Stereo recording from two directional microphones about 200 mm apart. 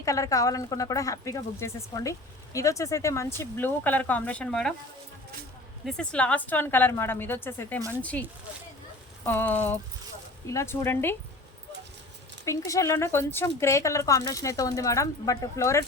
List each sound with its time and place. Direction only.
0.0 s speech: 15° left (ahead or behind)
5.8 s speech: 5° left (ahead or behind)
12.5 s speech: 15° left (ahead or behind)